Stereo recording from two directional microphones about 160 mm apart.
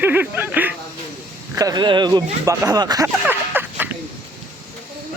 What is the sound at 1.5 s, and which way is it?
Speech, 25° right (ahead or behind).